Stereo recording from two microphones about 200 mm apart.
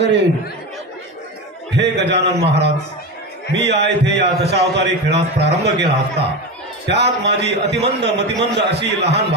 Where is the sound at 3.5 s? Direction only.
60° right (ahead or behind).